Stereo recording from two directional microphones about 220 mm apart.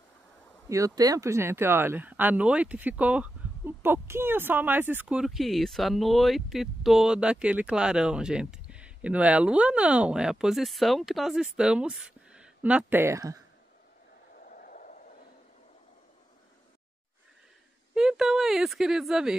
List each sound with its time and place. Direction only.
0.7 s speech: 15° right (ahead or behind)
14.4 s a sound: 40° left (ahead or behind)
17.9 s speech: centre (ahead or behind)